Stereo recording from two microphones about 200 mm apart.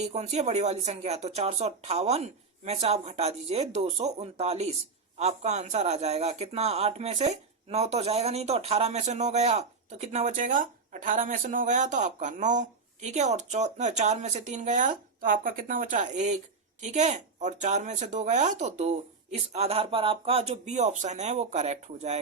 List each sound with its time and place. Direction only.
0.0 s speech: 35° right (ahead or behind)